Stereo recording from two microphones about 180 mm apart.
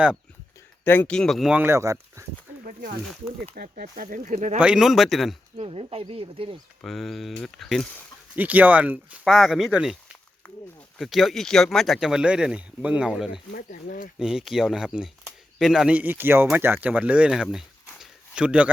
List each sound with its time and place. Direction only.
0.9 s speech: 10° left (ahead or behind); by 2.2 s 15° right (ahead or behind)
3.1 s speech: 5° left (ahead or behind)
3.5 s speech: 50° right (ahead or behind)
4.6 s speech: 5° right (ahead or behind)
5.5 s speech: 35° right (ahead or behind)
6.8 s speech: centre (ahead or behind)
8.4 s speech: 10° right (ahead or behind)
13.5 s speech: 55° left (ahead or behind)
14.2 s speech: 5° right (ahead or behind)
18.0 s a sound: 5° right (ahead or behind)